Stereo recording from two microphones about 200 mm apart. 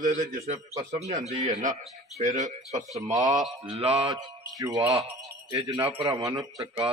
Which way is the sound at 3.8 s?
30° right (ahead or behind).